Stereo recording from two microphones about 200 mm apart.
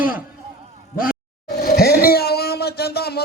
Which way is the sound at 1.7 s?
50° left (ahead or behind).